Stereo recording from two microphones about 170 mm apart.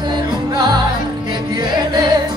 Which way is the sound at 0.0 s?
25° right (ahead or behind).